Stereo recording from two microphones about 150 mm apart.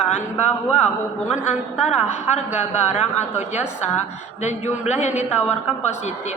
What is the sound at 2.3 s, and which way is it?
A woman's voice, 50° left (ahead or behind).